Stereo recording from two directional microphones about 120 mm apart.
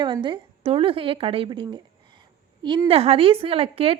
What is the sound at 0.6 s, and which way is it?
A woman's voice, 50° right (ahead or behind).